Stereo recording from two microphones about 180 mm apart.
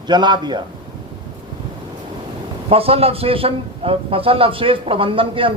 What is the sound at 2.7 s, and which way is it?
Speech, 35° right (ahead or behind).